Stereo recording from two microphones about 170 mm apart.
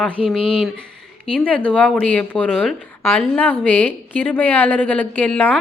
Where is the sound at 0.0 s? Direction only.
5° left (ahead or behind).